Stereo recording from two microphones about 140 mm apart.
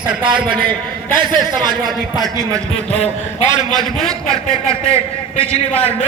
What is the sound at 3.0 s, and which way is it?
Speech, 55° left (ahead or behind).